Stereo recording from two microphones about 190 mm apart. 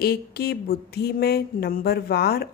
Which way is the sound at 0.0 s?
55° left (ahead or behind).